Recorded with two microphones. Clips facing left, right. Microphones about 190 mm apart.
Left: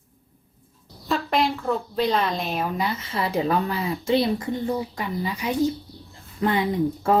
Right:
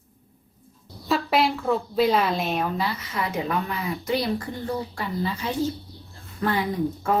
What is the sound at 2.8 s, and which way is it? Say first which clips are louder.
Speech: left 2 dB; 25° left (ahead or behind).